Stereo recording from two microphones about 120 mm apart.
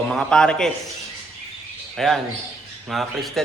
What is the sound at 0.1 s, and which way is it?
Speech, 5° left (ahead or behind).